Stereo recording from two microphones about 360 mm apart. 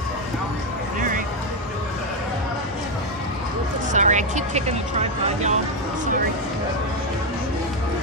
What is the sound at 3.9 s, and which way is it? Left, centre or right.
Speech, centre.